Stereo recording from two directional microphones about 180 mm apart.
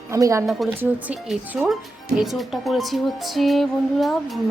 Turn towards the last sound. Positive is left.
turn(degrees=0)  # may be behind; listen again after turning